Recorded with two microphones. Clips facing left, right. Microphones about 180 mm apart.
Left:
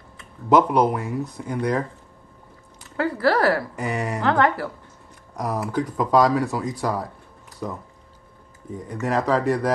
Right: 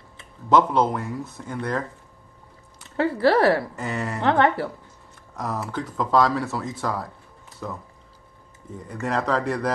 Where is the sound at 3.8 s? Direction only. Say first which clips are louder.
Left 2 dB; 15° left (ahead or behind).